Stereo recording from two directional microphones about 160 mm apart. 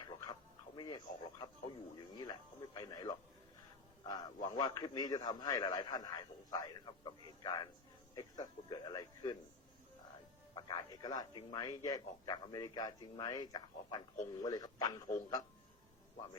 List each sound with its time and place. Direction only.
0.8 s a man's voice: 25° left (ahead or behind)
10.5 s a man's voice: 30° left (ahead or behind)